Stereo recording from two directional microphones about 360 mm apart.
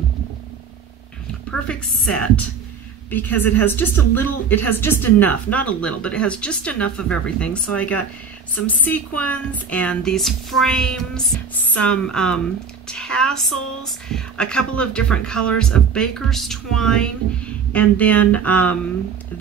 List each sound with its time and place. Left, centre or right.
1.7 s a woman's voice: centre